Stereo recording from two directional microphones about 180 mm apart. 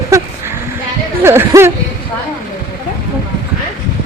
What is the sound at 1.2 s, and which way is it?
Speech, 15° right (ahead or behind).